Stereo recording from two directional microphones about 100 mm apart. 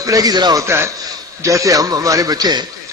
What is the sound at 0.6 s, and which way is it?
A man's voice, 25° right (ahead or behind).